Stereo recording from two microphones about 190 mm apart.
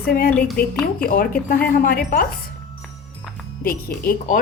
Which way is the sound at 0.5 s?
50° left (ahead or behind).